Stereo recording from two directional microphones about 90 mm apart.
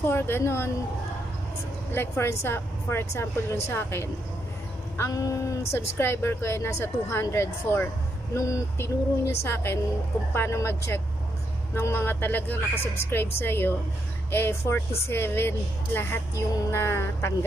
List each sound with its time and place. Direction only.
0.1 s a woman's voice: 25° left (ahead or behind)
1.9 s a woman's voice: 25° left (ahead or behind)